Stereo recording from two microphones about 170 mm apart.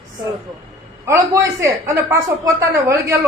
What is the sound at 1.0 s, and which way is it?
A man's voice, 20° right (ahead or behind).